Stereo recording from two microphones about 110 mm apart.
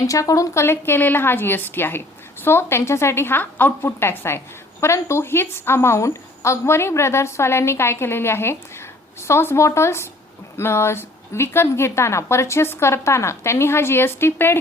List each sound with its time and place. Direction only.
0.0 s a woman's voice: 30° left (ahead or behind)